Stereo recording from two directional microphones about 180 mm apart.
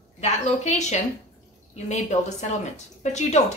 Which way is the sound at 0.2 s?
40° left (ahead or behind).